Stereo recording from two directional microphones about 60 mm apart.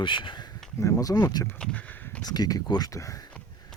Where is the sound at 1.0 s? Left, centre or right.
Left.